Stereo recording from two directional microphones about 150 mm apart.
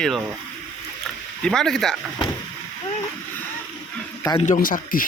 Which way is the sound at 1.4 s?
5° left (ahead or behind).